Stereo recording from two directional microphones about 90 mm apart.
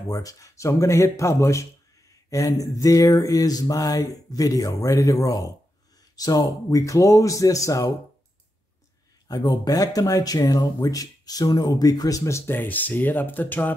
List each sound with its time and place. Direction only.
0.1 s a sound: 40° left (ahead or behind)
9.3 s speech: 45° left (ahead or behind)
12.3 s speech: 30° left (ahead or behind)